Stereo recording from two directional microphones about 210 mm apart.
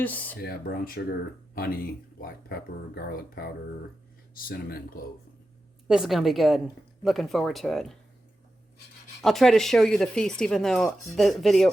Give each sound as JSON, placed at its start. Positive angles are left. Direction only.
{"t": 0.0, "sound": "speech", "side_deg": 10}
{"t": 0.4, "sound": "speech", "side_deg": 45}
{"t": 4.4, "sound": "speech", "side_deg": 45}
{"t": 5.9, "sound": "speech", "side_deg": 0}
{"t": 9.2, "sound": "speech", "side_deg": 0}